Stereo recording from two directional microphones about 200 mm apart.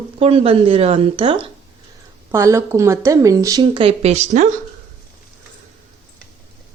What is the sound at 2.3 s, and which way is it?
Speech, 15° right (ahead or behind).